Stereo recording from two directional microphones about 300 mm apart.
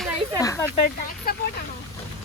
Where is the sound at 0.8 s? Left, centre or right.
Left.